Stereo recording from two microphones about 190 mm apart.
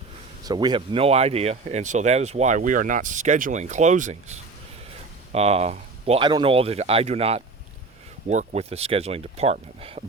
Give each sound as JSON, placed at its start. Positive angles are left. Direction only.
{"t": 0.4, "sound": "speech", "side_deg": -20}